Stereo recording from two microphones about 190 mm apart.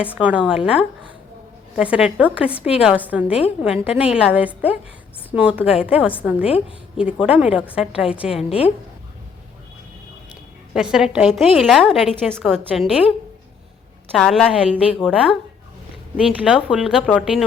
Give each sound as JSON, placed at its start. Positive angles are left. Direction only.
{"t": 0.0, "sound": "a woman's voice", "side_deg": -5}
{"t": 6.4, "sound": "a woman's voice", "side_deg": 30}
{"t": 6.9, "sound": "a woman's voice", "side_deg": -5}
{"t": 10.8, "sound": "a woman's voice", "side_deg": -5}